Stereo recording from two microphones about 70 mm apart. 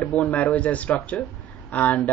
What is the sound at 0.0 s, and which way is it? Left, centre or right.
Speech, centre.